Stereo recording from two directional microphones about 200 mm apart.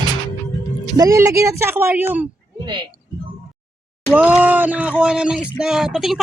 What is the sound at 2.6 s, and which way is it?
Speech, 20° right (ahead or behind).